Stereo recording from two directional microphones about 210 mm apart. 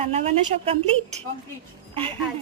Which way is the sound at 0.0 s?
30° right (ahead or behind).